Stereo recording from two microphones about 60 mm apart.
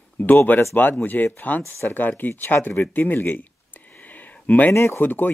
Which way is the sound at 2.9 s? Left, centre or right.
Left.